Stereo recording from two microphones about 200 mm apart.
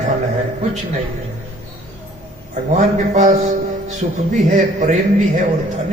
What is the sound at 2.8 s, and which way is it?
A man's voice, 35° right (ahead or behind).